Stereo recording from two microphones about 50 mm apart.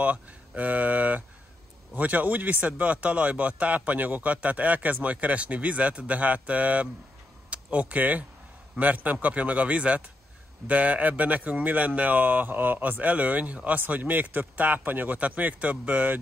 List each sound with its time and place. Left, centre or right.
0.0 s speech: right